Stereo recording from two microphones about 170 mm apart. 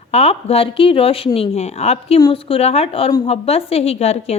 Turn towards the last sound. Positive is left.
turn(degrees=40)  # may be behind; listen again after turning